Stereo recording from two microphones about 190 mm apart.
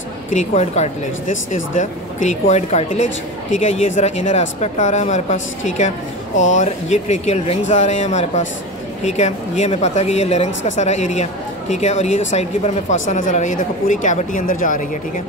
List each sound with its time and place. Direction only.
0.3 s speech: 35° left (ahead or behind)